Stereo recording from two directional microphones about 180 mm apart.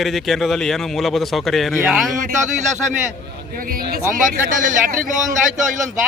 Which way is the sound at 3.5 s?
55° right (ahead or behind).